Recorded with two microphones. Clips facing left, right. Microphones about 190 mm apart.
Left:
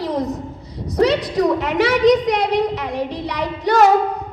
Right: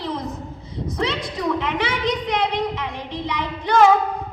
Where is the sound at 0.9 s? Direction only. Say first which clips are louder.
Left 10 dB; 40° left (ahead or behind).